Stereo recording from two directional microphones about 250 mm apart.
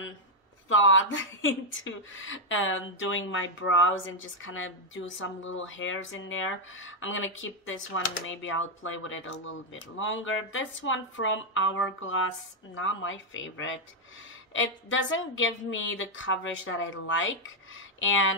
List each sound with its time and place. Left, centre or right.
0.7 s speech: left